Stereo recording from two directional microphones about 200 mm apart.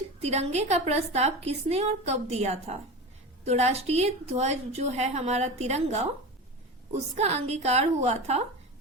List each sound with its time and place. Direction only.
0.2 s a woman's voice: 35° right (ahead or behind)
7.2 s a woman's voice: 35° right (ahead or behind)